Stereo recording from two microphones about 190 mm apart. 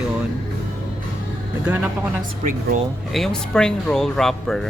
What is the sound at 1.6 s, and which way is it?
Speech, 10° right (ahead or behind).